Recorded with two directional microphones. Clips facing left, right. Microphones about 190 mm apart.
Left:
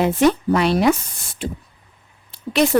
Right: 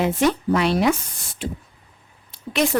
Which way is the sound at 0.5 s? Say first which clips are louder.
Left 2 dB; 40° left (ahead or behind).